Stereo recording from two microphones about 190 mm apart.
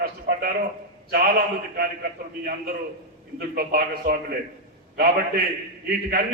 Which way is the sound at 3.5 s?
50° right (ahead or behind).